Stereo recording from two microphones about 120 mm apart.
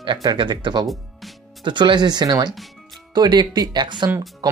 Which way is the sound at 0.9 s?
Centre (ahead or behind).